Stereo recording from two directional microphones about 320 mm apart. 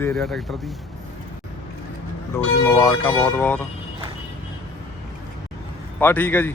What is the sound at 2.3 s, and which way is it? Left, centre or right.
Speech, centre.